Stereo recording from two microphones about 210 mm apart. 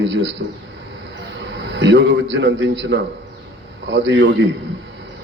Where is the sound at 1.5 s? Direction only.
55° right (ahead or behind).